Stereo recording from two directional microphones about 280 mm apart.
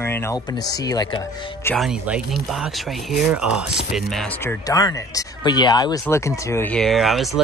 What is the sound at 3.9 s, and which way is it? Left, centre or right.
Mantra, centre.